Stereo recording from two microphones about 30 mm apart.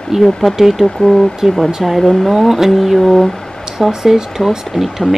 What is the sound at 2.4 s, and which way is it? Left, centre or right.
Speech, centre.